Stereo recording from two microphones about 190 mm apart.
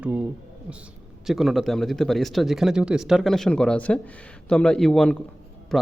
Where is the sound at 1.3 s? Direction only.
Centre (ahead or behind).